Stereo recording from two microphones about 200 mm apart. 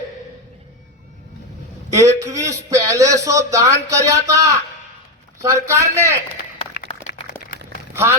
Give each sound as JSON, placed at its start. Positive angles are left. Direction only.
{"t": 1.9, "sound": "speech", "side_deg": -15}
{"t": 7.9, "sound": "speech", "side_deg": -15}